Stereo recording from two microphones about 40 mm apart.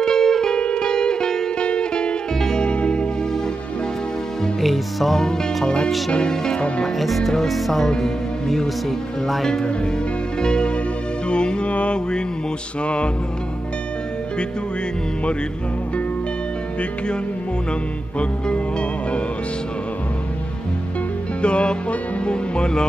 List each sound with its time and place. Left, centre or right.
0.0 s music: centre
0.6 s music: left
4.6 s music: centre
6.1 s music: centre
7.0 s music: centre
8.0 s speech: centre
10.4 s music: left
18.5 s music: left
21.4 s music: left
22.2 s speech: left